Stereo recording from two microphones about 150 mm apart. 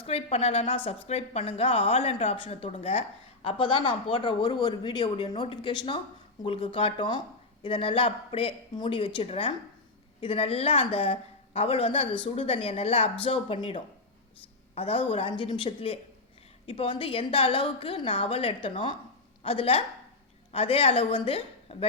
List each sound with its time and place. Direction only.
0.0 s a woman's voice: 40° left (ahead or behind)